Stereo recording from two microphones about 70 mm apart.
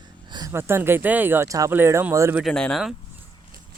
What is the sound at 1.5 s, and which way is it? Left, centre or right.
Speech, right.